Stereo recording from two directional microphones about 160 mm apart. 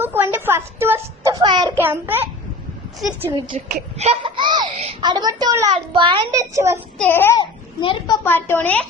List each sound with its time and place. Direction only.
0.0 s a child's voice: 10° right (ahead or behind)
1.8 s a child's voice: 15° right (ahead or behind)
3.5 s speech: 40° right (ahead or behind)
4.8 s speech: 40° right (ahead or behind)
5.0 s a child's voice: 25° right (ahead or behind)
7.0 s speech: 15° left (ahead or behind)
7.3 s a child's voice: 30° left (ahead or behind)
8.2 s speech: 15° left (ahead or behind)